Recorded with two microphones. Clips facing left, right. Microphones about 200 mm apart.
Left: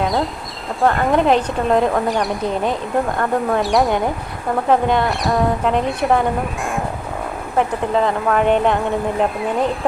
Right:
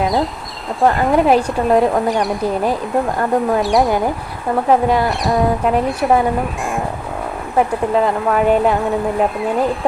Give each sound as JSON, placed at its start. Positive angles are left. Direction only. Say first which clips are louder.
{"t": 0.0, "sound": "speech", "louder": "right 2 dB", "side_deg": 0}
{"t": 7.9, "sound": "speech", "louder": "right 1 dB", "side_deg": -5}